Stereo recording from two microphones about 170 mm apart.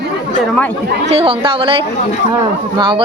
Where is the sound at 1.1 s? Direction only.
35° right (ahead or behind).